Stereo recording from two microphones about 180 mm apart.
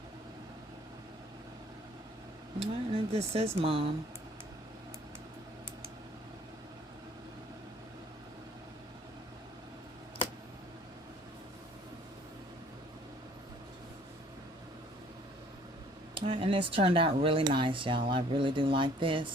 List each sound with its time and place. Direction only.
2.6 s speech: 30° right (ahead or behind)
16.1 s speech: 30° right (ahead or behind)